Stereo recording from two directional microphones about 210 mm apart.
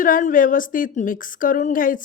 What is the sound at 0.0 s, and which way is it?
Speech, 40° left (ahead or behind).